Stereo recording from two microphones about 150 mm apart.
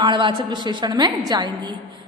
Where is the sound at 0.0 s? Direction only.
30° right (ahead or behind).